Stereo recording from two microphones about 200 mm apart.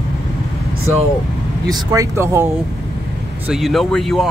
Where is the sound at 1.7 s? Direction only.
20° right (ahead or behind).